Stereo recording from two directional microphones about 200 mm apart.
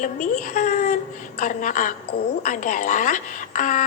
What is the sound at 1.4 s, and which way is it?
A woman's voice, 40° left (ahead or behind).